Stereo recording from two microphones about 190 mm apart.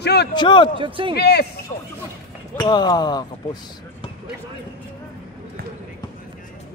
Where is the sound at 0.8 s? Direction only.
25° right (ahead or behind).